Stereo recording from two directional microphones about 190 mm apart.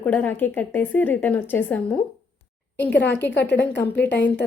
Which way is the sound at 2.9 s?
60° left (ahead or behind).